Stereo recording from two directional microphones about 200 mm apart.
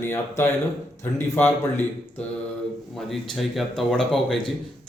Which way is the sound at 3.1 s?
Centre (ahead or behind).